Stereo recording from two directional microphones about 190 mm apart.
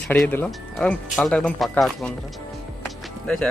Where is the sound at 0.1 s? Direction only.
10° left (ahead or behind).